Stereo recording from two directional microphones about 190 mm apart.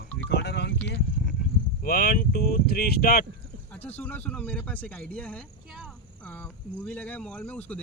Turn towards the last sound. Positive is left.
turn(degrees=5)  # may be behind; listen again after turning